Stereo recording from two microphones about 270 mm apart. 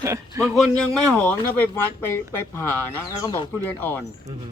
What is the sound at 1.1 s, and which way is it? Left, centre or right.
Speech, centre.